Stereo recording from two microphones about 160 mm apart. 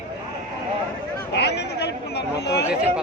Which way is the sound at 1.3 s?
90° left.